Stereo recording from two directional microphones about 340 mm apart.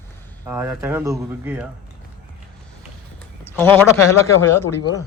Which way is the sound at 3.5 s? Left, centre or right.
Centre.